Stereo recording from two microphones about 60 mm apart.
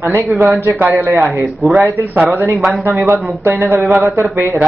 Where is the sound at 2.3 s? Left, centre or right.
Right.